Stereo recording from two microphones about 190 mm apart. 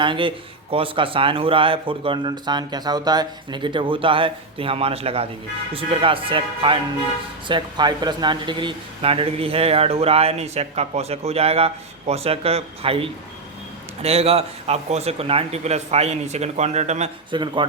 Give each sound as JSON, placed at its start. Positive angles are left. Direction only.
{"t": 0.0, "sound": "speech", "side_deg": -25}
{"t": 17.3, "sound": "speech", "side_deg": -25}